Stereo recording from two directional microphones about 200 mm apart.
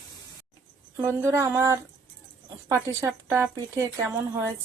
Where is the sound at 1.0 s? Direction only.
10° right (ahead or behind).